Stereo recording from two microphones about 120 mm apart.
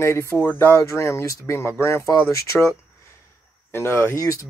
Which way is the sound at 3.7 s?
20° left (ahead or behind).